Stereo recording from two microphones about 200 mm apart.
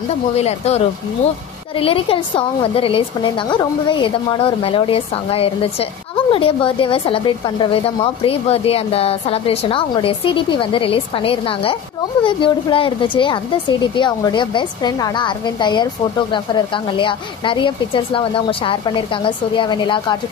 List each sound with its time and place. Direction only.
0.4 s speech: 30° left (ahead or behind)